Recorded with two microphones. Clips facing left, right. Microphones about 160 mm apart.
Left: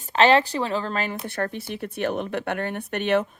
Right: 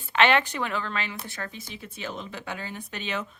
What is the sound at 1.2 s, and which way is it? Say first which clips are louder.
Speech: left 10 dB; 60° left (ahead or behind).